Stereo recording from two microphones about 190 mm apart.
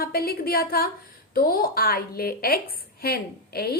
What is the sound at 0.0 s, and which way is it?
A woman's voice, 55° left (ahead or behind).